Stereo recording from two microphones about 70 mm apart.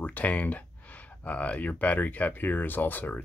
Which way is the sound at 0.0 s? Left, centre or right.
Left.